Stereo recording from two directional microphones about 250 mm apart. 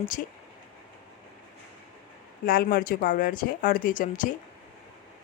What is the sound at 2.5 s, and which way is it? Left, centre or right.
Speech, left.